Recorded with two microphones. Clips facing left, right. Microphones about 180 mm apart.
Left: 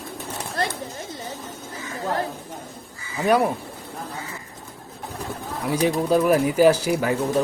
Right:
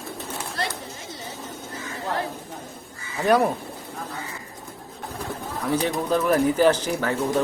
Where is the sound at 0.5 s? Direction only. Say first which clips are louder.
Left 4 dB; 55° left (ahead or behind).